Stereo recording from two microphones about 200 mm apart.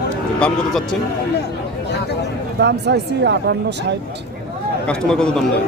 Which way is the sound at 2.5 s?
55° right (ahead or behind).